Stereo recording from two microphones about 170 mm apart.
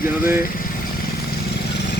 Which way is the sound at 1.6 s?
75° left (ahead or behind).